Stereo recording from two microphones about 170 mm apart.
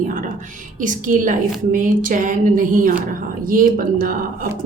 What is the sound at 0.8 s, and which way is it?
A woman's voice, 50° right (ahead or behind).